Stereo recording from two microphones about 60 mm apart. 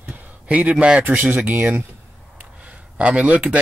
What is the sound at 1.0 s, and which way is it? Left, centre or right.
Speech, right.